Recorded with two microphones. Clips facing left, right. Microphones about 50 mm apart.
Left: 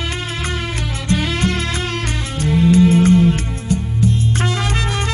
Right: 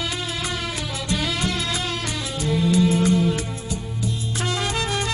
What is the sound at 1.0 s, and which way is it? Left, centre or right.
Music, left.